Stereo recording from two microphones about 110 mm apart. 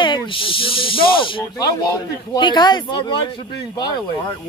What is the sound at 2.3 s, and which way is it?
Speech, 40° left (ahead or behind).